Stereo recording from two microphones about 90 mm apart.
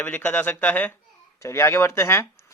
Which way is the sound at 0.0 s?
20° left (ahead or behind).